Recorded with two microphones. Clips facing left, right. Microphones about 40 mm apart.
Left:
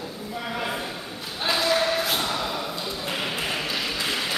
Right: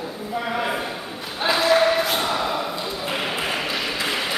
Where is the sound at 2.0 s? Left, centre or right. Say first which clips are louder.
Right 3 dB; centre.